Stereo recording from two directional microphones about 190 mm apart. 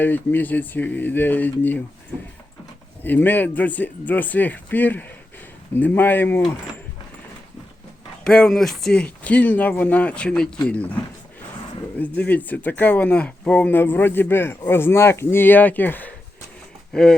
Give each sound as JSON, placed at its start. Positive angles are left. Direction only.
{"t": 0.0, "sound": "speech", "side_deg": 10}
{"t": 3.0, "sound": "speech", "side_deg": 10}
{"t": 8.2, "sound": "speech", "side_deg": 5}
{"t": 11.9, "sound": "speech", "side_deg": 10}